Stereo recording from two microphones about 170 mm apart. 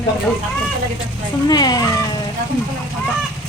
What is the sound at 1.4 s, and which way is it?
Speech, 25° left (ahead or behind).